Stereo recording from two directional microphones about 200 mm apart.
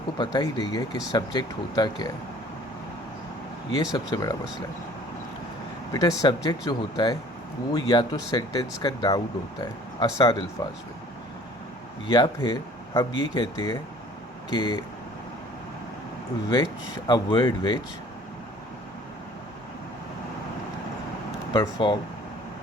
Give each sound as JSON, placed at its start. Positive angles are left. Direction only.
{"t": 0.2, "sound": "speech", "side_deg": 20}
{"t": 3.9, "sound": "speech", "side_deg": 20}
{"t": 5.9, "sound": "speech", "side_deg": 20}
{"t": 12.0, "sound": "speech", "side_deg": 20}
{"t": 17.1, "sound": "speech", "side_deg": 20}
{"t": 21.6, "sound": "speech", "side_deg": 25}